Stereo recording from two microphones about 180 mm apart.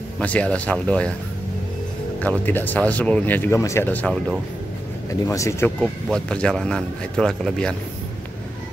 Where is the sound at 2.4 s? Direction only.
10° left (ahead or behind).